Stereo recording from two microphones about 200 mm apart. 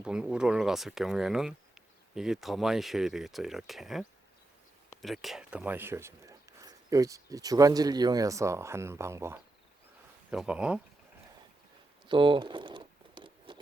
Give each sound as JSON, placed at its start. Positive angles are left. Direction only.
{"t": 0.0, "sound": "speech", "side_deg": -5}
{"t": 5.0, "sound": "speech", "side_deg": 0}
{"t": 12.0, "sound": "a sound", "side_deg": -25}